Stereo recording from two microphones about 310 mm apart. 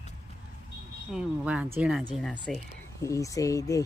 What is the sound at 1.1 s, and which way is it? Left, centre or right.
Speech, centre.